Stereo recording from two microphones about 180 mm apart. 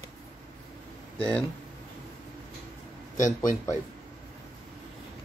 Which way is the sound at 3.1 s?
45° left (ahead or behind).